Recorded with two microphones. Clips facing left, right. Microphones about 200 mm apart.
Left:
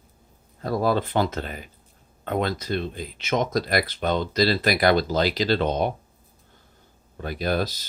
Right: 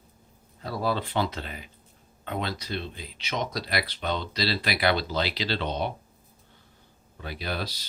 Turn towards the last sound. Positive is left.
turn(degrees=45)  # may be behind; listen again after turning